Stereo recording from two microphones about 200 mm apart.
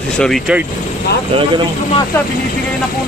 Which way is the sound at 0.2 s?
Centre (ahead or behind).